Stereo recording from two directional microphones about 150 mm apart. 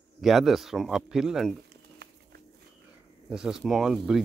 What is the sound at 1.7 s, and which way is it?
Bird, 90° right.